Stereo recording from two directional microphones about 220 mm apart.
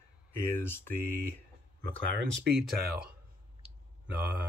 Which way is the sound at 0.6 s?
10° left (ahead or behind).